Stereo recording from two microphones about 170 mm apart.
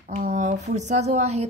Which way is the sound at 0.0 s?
45° right (ahead or behind).